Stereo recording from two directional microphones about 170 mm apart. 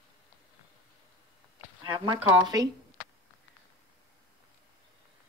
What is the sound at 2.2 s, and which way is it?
Speech, 20° right (ahead or behind).